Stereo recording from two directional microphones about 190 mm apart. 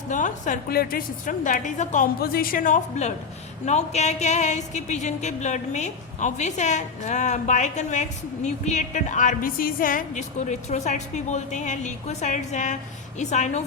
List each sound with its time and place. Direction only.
0.1 s a woman's voice: 40° left (ahead or behind)
3.7 s music: 35° left (ahead or behind)